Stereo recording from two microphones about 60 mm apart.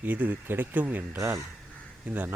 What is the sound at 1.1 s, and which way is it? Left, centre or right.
Speech, right.